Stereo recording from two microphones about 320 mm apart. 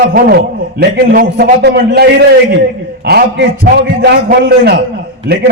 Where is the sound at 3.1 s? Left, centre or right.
Right.